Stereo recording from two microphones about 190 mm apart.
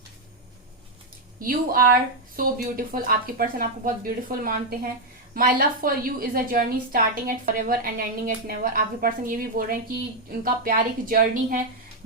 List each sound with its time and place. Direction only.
1.4 s speech: 50° right (ahead or behind)